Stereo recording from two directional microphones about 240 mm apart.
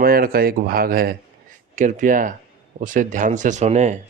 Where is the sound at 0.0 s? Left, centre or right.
Right.